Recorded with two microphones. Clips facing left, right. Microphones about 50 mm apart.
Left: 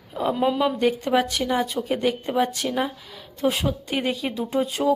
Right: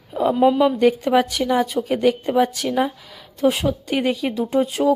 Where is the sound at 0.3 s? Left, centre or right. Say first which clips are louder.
Right 6 dB; centre.